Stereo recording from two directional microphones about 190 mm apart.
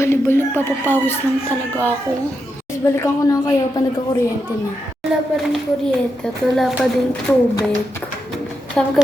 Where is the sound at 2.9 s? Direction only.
15° left (ahead or behind).